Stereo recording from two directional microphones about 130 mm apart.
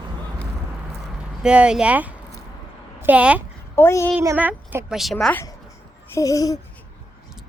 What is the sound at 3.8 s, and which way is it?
Babbling, 20° left (ahead or behind).